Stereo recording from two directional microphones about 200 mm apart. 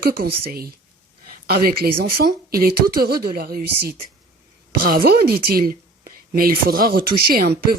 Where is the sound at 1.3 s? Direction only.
50° right (ahead or behind).